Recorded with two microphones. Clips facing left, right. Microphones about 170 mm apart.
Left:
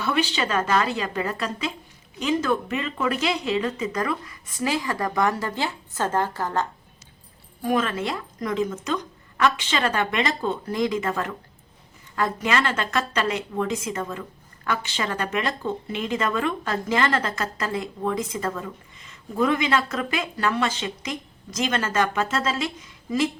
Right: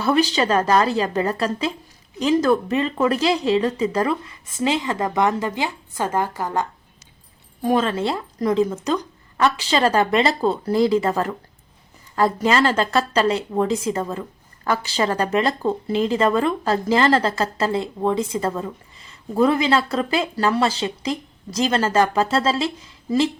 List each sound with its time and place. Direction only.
0.0 s speech: 40° right (ahead or behind); by 6.7 s 15° right (ahead or behind)
7.6 s speech: 30° right (ahead or behind)